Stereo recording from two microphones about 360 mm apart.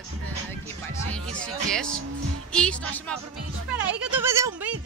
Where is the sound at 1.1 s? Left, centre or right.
Centre.